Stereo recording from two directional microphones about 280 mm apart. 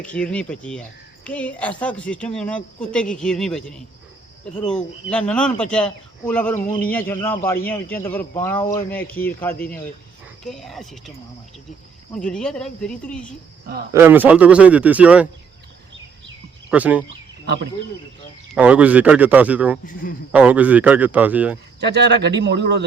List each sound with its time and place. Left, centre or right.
0.0 s speech: centre
5.1 s speech: centre
12.1 s speech: centre
13.9 s speech: centre
16.6 s speech: centre
18.5 s speech: centre
19.8 s speech: left
20.3 s speech: centre
21.8 s speech: right